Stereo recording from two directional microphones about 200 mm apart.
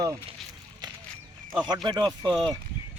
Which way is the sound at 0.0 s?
20° right (ahead or behind).